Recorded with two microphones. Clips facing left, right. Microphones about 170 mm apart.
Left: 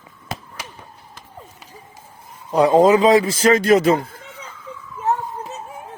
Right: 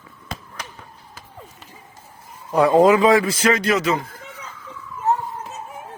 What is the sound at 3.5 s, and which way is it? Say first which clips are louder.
Speech: left 6 dB; 50° left (ahead or behind).